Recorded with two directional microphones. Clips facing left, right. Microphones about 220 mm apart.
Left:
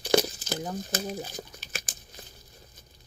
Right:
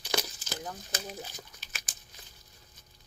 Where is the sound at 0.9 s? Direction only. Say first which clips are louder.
Left 7 dB; 45° left (ahead or behind).